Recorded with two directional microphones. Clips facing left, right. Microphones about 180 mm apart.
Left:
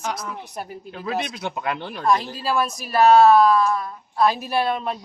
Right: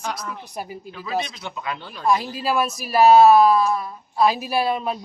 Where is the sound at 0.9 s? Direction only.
55° left (ahead or behind).